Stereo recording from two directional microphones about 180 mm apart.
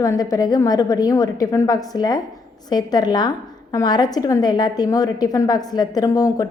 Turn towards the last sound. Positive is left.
turn(degrees=20)  # may be behind; listen again after turning